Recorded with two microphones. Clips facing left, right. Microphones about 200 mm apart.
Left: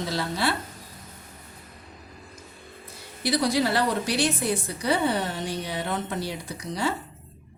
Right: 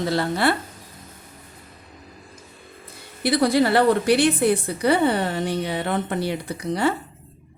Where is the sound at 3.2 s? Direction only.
55° right (ahead or behind).